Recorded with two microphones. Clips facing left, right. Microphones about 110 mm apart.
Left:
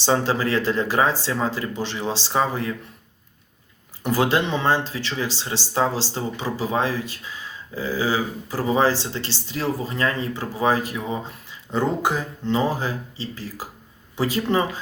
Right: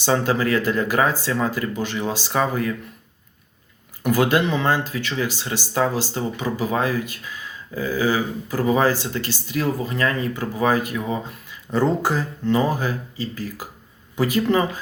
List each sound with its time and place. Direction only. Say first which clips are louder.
0.0 s speech: right 1 dB; 30° left (ahead or behind)
4.0 s speech: right 2 dB; 30° left (ahead or behind)